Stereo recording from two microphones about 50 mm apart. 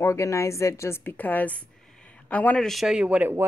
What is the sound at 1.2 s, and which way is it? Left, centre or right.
A woman's voice, left.